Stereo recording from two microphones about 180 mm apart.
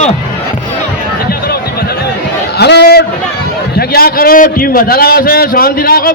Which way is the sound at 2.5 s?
65° left (ahead or behind).